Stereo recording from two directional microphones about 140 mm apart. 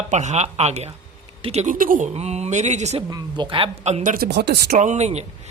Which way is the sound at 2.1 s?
50° right (ahead or behind).